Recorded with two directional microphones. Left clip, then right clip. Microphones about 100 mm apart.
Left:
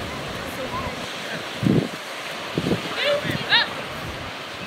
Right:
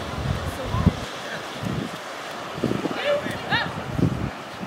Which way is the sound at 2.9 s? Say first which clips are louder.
Left 3 dB; 15° left (ahead or behind).